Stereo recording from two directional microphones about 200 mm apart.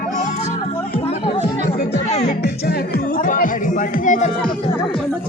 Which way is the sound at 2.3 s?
55° left (ahead or behind).